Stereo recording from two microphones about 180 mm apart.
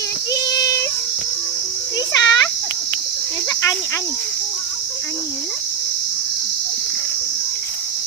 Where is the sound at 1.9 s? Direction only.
20° left (ahead or behind).